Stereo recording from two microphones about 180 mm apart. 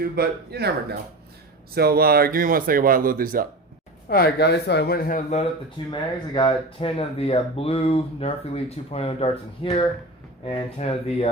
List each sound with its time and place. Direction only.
0.0 s speech: 60° right (ahead or behind)
4.1 s speech: 60° left (ahead or behind); by 5.5 s 45° left (ahead or behind)
5.9 s speech: 25° left (ahead or behind)